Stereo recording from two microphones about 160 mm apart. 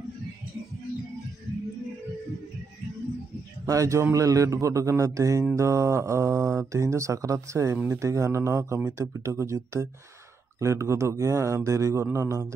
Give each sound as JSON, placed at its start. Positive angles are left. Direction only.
{"t": 3.6, "sound": "speech", "side_deg": -20}